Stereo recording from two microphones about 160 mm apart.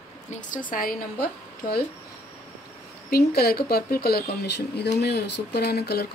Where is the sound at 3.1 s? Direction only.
75° left (ahead or behind).